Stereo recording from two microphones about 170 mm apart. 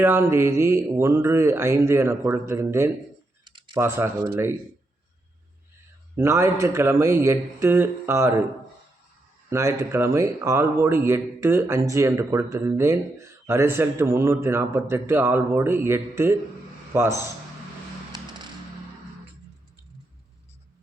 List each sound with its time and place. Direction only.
0.0 s a man's voice: 15° right (ahead or behind)
3.4 s typing: 30° right (ahead or behind)
3.8 s a man's voice: 15° right (ahead or behind)
6.1 s a man's voice: 15° right (ahead or behind)
9.5 s a man's voice: 15° right (ahead or behind)